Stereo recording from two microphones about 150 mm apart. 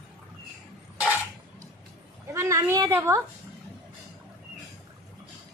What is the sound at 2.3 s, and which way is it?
Speech, 20° right (ahead or behind).